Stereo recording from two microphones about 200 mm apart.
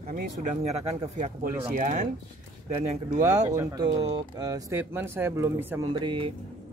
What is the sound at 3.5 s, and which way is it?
Speech, 15° right (ahead or behind).